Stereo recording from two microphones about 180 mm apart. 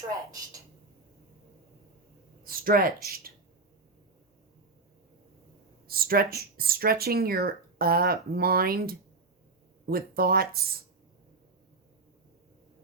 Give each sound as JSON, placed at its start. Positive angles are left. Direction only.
{"t": 2.4, "sound": "speech", "side_deg": -55}
{"t": 5.9, "sound": "speech", "side_deg": -55}